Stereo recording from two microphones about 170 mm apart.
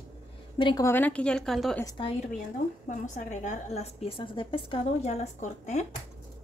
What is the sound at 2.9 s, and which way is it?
A woman's voice, 45° left (ahead or behind).